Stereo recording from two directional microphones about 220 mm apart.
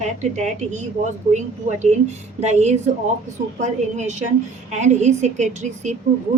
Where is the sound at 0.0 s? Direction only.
30° right (ahead or behind).